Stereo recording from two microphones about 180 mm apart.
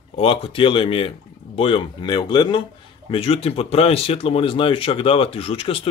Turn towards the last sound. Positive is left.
turn(degrees=30)  # may be behind; listen again after turning